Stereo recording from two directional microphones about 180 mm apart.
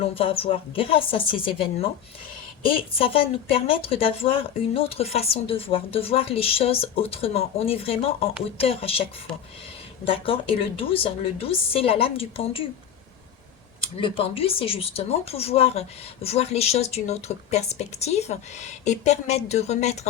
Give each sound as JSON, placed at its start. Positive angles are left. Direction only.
{"t": 0.0, "sound": "speech", "side_deg": 30}
{"t": 2.9, "sound": "speech", "side_deg": 30}
{"t": 13.9, "sound": "speech", "side_deg": 30}